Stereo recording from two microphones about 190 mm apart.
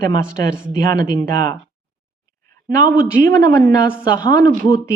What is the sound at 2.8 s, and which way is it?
Speech, 50° right (ahead or behind).